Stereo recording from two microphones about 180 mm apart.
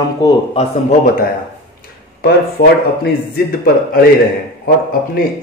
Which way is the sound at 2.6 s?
55° left (ahead or behind).